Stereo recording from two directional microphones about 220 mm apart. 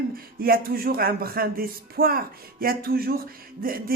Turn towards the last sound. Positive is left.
turn(degrees=-40)  # may be behind; listen again after turning